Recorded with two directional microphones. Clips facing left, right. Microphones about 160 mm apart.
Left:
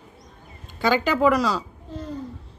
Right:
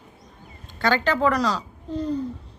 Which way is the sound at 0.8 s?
10° left (ahead or behind).